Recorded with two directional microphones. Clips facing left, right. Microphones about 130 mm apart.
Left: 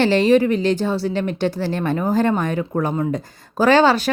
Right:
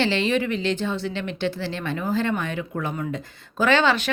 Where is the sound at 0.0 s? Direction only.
45° left (ahead or behind).